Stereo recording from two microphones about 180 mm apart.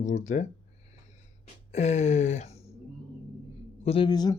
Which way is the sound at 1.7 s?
40° left (ahead or behind).